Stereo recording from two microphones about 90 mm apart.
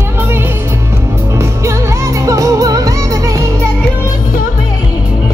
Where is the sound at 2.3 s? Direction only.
35° right (ahead or behind).